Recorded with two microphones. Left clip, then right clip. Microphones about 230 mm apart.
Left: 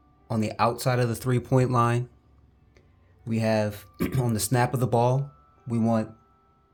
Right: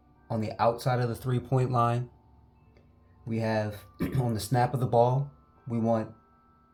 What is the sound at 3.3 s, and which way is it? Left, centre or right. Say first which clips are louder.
Speech: left 5 dB; left.